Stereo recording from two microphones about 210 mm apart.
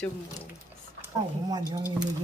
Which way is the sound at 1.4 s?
20° right (ahead or behind).